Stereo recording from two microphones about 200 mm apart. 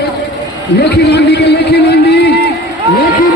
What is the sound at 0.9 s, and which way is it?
A man's voice, 55° left (ahead or behind).